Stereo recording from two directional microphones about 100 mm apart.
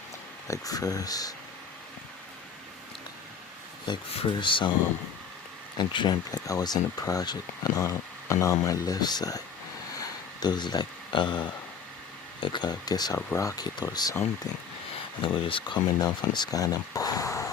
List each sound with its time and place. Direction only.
0.4 s speech: 35° left (ahead or behind)
3.9 s speech: 50° left (ahead or behind)
5.7 s speech: 50° left (ahead or behind)
10.0 s a sound: 45° left (ahead or behind)
12.4 s speech: 50° left (ahead or behind)
13.1 s speech: 25° left (ahead or behind)
13.6 s speech: 45° left (ahead or behind)
15.2 s speech: 60° left (ahead or behind); by 17.5 s 35° left (ahead or behind)